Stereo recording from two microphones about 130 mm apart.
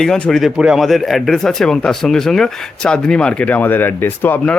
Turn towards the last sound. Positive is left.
turn(degrees=15)  # may be behind; listen again after turning